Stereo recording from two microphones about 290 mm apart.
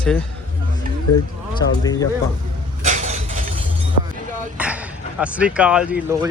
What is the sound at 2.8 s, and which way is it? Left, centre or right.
Vehicle, right.